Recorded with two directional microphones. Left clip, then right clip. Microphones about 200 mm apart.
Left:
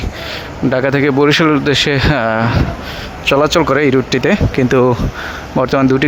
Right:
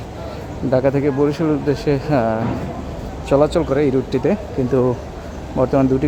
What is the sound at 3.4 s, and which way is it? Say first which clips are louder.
Speech: left 5 dB; 5° left (ahead or behind).